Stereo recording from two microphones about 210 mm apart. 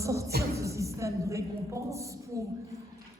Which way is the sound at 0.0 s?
15° right (ahead or behind).